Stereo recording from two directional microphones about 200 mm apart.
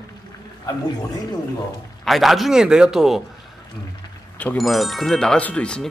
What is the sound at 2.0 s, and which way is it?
Speech, centre (ahead or behind).